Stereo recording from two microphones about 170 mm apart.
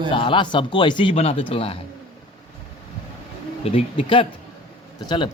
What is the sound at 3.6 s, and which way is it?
Speech, 35° left (ahead or behind).